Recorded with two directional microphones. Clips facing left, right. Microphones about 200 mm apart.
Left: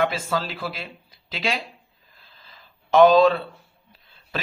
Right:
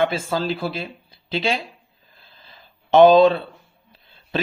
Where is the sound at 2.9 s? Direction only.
25° right (ahead or behind).